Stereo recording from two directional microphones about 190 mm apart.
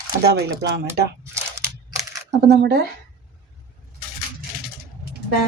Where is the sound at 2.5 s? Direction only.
60° right (ahead or behind).